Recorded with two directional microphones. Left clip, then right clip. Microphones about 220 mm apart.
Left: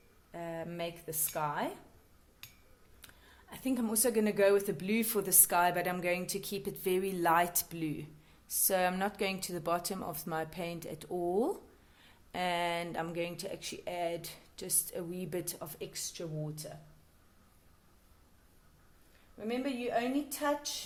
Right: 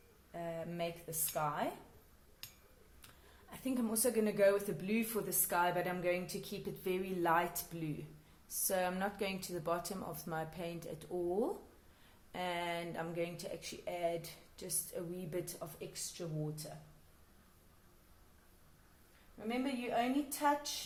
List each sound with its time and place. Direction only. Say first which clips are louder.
0.3 s speech: left 2 dB; 40° left (ahead or behind)
3.5 s a woman's voice: left 4 dB; 40° left (ahead or behind)
19.5 s a woman's voice: left 3 dB; 40° left (ahead or behind)